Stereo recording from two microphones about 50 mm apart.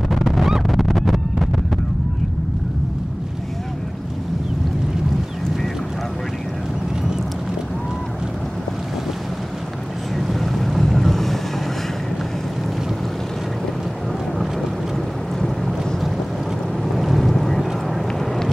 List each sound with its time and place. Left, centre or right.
0.1 s a sound: centre
10.1 s boat: centre
15.4 s boat: centre